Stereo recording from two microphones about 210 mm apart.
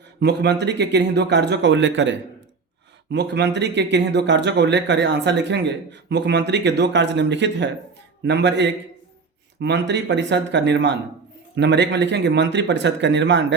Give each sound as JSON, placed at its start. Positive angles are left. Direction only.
{"t": 0.2, "sound": "speech", "side_deg": -55}